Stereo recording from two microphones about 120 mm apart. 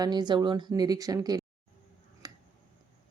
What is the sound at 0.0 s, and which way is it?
A woman's voice, 35° right (ahead or behind).